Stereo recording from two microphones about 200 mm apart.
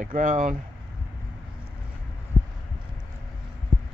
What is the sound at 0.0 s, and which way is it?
Speech, 40° right (ahead or behind).